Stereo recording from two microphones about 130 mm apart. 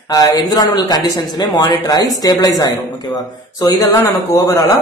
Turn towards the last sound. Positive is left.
turn(degrees=20)  # may be behind; listen again after turning